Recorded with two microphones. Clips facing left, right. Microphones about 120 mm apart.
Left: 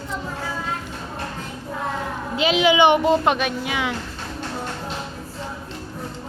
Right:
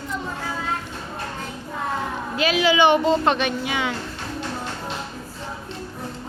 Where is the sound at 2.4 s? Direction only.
20° left (ahead or behind); by 3.9 s centre (ahead or behind).